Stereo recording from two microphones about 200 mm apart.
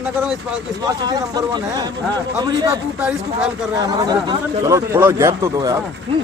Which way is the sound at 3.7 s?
20° right (ahead or behind).